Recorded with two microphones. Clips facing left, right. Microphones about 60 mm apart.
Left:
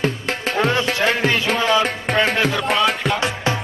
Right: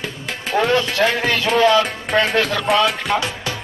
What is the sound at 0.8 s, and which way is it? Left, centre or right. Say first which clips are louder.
Speech: even; left.